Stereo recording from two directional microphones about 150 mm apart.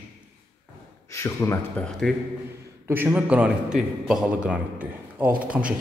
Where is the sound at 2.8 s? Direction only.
15° right (ahead or behind).